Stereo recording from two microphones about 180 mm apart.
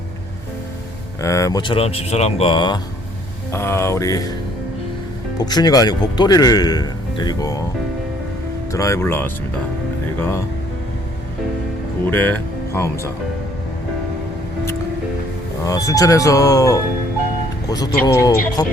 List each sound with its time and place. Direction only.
1.2 s speech: 15° left (ahead or behind)
3.5 s speech: 15° left (ahead or behind)
5.4 s speech: 20° left (ahead or behind)
8.7 s speech: 15° left (ahead or behind)
12.1 s speech: 10° left (ahead or behind)
15.6 s speech: 20° left (ahead or behind)